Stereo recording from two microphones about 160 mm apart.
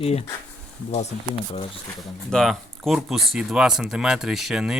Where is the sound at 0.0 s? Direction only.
40° left (ahead or behind).